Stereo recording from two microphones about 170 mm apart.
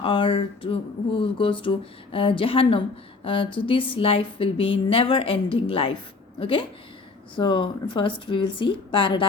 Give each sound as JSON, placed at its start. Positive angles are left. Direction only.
{"t": 0.0, "sound": "speech", "side_deg": 30}